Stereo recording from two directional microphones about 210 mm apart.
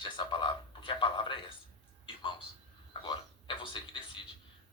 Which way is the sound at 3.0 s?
25° left (ahead or behind).